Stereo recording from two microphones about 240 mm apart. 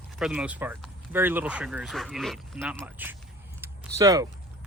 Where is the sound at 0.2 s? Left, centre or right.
Centre.